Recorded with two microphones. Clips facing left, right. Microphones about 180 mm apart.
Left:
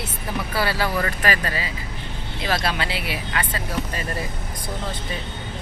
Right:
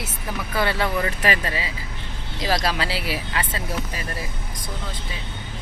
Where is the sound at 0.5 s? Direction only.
20° right (ahead or behind).